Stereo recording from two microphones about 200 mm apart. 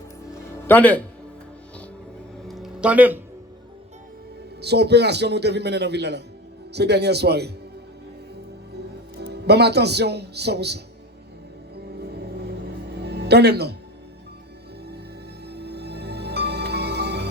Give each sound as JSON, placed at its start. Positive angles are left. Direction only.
{"t": 0.7, "sound": "speech", "side_deg": 10}
{"t": 2.5, "sound": "a sound", "side_deg": 0}
{"t": 4.6, "sound": "a man's voice", "side_deg": -55}
{"t": 9.1, "sound": "a man's voice", "side_deg": -55}
{"t": 11.9, "sound": "music", "side_deg": -55}
{"t": 15.5, "sound": "music", "side_deg": -55}